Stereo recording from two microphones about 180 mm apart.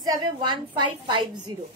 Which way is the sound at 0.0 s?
25° right (ahead or behind).